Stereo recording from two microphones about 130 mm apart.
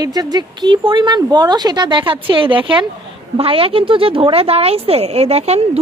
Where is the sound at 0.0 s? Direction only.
30° right (ahead or behind).